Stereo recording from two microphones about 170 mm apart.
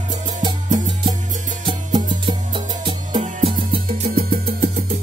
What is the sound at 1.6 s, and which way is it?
Music, 25° right (ahead or behind).